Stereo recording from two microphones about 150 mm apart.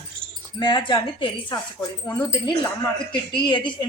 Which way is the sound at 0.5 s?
35° left (ahead or behind).